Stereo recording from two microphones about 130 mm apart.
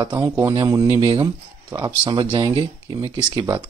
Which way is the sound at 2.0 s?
40° right (ahead or behind).